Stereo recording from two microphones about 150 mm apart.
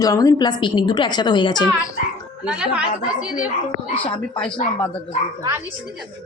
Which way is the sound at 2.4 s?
5° right (ahead or behind).